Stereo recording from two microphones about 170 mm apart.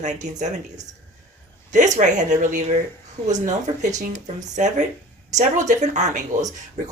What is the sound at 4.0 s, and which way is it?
Speech, 45° right (ahead or behind).